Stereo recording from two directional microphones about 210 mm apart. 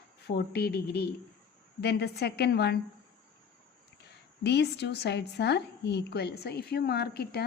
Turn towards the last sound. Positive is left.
turn(degrees=50)  # may be behind; listen again after turning